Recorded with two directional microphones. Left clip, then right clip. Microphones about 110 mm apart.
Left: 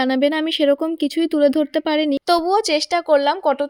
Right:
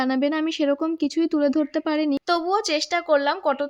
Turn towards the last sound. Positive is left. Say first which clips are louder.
# left 4 dB
turn(degrees=35)  # may be behind; listen again after turning